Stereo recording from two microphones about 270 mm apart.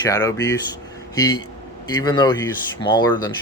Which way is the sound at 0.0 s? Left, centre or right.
Centre.